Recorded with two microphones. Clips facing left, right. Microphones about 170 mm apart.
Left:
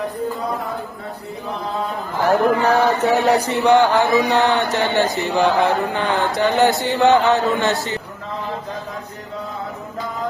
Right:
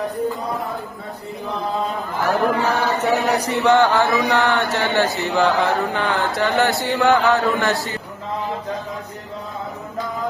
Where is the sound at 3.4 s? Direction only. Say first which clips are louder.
Left 1 dB; 20° left (ahead or behind).